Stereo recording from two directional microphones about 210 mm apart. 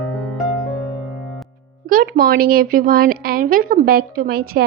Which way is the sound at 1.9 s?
45° right (ahead or behind).